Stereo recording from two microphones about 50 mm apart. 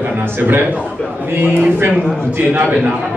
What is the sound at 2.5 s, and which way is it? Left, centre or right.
Speech, right.